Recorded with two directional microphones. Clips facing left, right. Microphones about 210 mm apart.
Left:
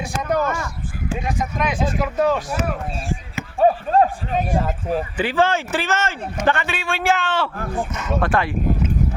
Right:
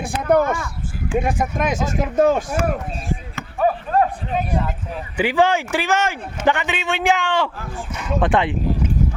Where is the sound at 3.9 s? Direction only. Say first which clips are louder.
Left 1 dB; 30° left (ahead or behind).